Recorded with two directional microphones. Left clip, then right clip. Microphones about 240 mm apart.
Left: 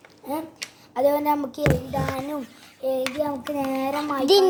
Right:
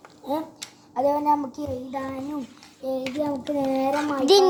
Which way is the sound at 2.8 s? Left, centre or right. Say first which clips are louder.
Left 3 dB; left.